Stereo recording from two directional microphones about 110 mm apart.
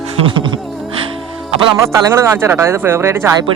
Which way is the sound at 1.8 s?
25° right (ahead or behind).